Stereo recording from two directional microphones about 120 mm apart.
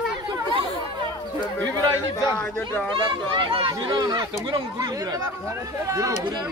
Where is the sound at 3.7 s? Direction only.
35° right (ahead or behind).